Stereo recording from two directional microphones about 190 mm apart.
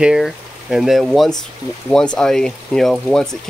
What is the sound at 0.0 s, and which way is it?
Speech, centre (ahead or behind).